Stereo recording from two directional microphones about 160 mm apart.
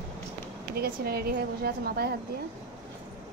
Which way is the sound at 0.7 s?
75° right (ahead or behind).